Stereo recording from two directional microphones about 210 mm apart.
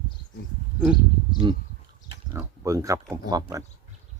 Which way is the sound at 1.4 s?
20° right (ahead or behind).